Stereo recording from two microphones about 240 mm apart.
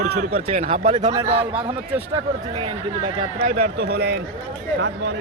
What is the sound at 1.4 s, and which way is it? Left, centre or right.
Speech, centre.